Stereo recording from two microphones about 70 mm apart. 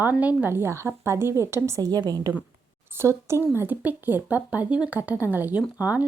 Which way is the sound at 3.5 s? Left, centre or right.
Right.